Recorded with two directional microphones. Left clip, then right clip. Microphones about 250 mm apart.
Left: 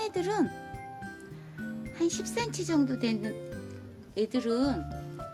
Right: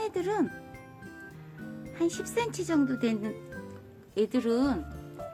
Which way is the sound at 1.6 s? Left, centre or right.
Centre.